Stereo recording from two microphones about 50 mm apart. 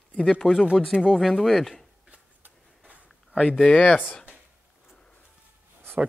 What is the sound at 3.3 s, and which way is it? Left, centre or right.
Speech, left.